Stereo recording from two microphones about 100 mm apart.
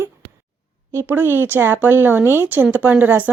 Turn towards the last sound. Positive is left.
turn(degrees=-15)  # may be behind; listen again after turning